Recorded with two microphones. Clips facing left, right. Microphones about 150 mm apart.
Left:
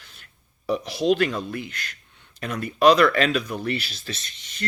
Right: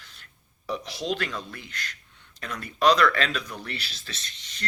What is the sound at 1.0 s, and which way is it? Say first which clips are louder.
Speech: left 10 dB; 15° left (ahead or behind).